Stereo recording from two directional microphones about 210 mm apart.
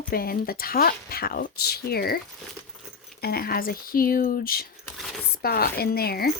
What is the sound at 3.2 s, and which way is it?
Speech, 45° left (ahead or behind).